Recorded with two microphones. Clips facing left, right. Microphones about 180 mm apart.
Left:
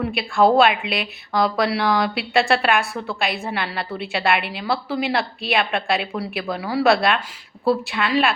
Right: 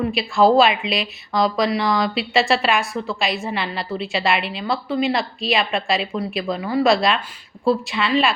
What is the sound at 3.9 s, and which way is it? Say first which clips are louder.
A woman's voice: even; 60° left (ahead or behind).